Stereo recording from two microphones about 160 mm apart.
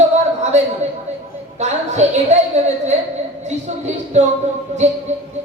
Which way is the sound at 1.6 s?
45° right (ahead or behind).